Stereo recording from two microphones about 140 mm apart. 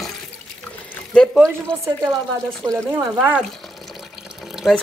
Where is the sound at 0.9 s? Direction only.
5° left (ahead or behind).